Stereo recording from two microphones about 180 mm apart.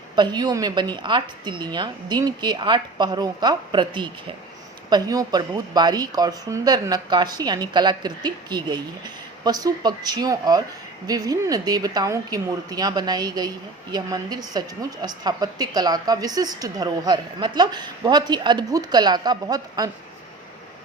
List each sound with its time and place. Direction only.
0.2 s a woman's voice: 25° right (ahead or behind)